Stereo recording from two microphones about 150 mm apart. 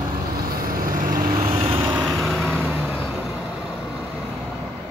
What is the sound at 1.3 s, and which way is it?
Vehicle, 25° right (ahead or behind).